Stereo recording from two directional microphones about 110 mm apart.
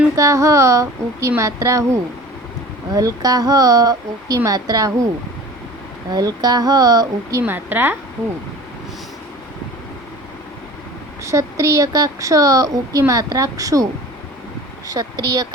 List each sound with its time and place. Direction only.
0.2 s a woman's voice: 30° right (ahead or behind)
6.1 s a woman's voice: 35° right (ahead or behind)
7.4 s a woman's voice: 20° right (ahead or behind)
11.2 s a woman's voice: 30° right (ahead or behind)
14.8 s a woman's voice: 35° right (ahead or behind)